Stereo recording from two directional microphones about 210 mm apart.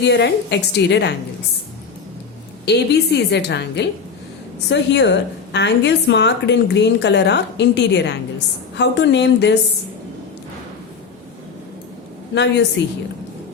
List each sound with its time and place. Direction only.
0.0 s a woman's voice: 55° left (ahead or behind)
2.6 s a woman's voice: 50° left (ahead or behind)
12.3 s a woman's voice: 55° left (ahead or behind)